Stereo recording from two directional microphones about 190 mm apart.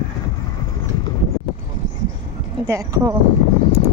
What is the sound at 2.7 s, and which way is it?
Speech, 15° right (ahead or behind).